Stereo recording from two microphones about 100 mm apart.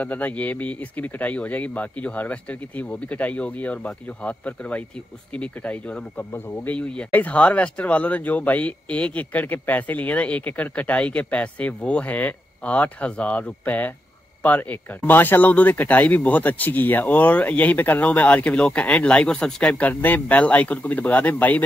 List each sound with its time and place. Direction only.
0.0 s speech: 15° left (ahead or behind)